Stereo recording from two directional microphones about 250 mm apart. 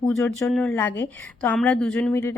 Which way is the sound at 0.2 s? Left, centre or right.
Centre.